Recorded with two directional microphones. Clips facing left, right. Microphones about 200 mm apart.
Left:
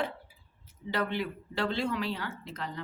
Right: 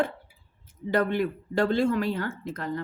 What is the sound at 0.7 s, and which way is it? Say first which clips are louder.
Speech: right 7 dB; 50° right (ahead or behind).